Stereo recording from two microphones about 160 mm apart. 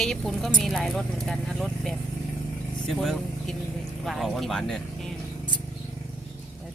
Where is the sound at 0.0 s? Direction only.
Centre (ahead or behind).